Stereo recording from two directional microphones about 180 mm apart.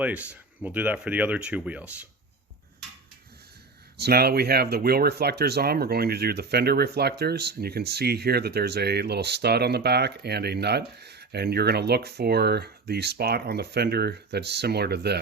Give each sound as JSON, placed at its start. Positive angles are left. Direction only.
{"t": 0.0, "sound": "speech", "side_deg": -10}
{"t": 3.9, "sound": "speech", "side_deg": -60}